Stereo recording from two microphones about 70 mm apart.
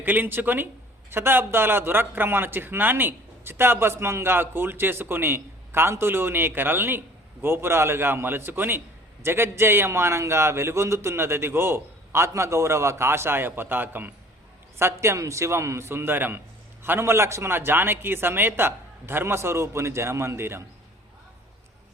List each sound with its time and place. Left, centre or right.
0.0 s a man's voice: right
14.8 s a man's voice: right